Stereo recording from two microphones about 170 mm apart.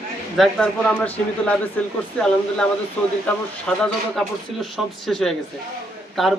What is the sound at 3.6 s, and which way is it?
Speech, 5° left (ahead or behind).